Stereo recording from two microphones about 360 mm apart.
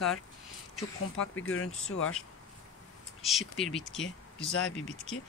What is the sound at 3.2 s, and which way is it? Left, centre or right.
Speech, centre.